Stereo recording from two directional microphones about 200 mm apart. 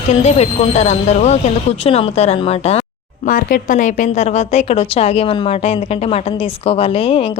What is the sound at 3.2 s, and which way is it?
A woman's voice, 40° left (ahead or behind).